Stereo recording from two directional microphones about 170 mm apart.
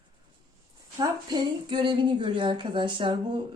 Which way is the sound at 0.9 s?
25° right (ahead or behind).